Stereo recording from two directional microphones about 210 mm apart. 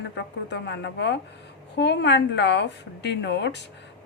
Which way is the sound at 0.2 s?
55° left (ahead or behind).